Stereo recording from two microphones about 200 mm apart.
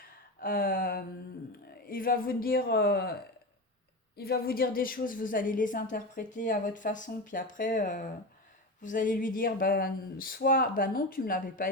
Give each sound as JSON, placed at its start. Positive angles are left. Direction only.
{"t": 0.3, "sound": "a sound", "side_deg": 45}
{"t": 1.9, "sound": "a woman's voice", "side_deg": 45}
{"t": 4.2, "sound": "a woman's voice", "side_deg": 50}